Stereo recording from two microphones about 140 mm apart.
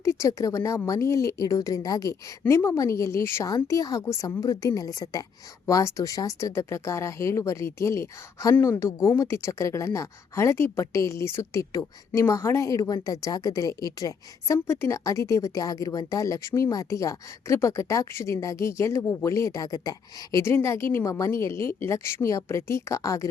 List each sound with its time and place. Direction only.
0.0 s speech: 20° left (ahead or behind)
2.4 s a woman's voice: 10° left (ahead or behind)
2.6 s speech: 20° left (ahead or behind)